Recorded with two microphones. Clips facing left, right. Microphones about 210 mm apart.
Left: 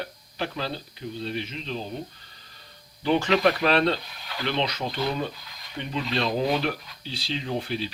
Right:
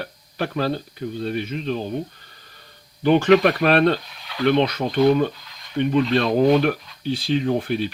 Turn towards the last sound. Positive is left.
turn(degrees=-55)  # may be behind; listen again after turning